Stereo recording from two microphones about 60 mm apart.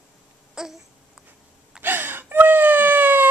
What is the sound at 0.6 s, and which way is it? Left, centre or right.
Babbling, centre.